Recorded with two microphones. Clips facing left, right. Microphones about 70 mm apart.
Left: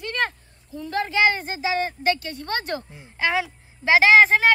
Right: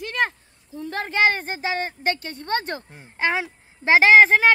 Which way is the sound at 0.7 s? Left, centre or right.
Right.